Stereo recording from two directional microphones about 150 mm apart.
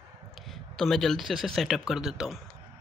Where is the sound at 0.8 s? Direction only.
5° left (ahead or behind).